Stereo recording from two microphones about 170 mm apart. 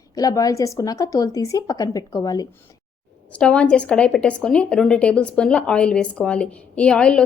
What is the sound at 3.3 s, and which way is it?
A woman's voice, 5° left (ahead or behind).